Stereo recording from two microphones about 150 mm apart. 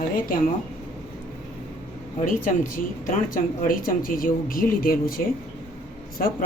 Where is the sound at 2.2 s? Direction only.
65° left (ahead or behind).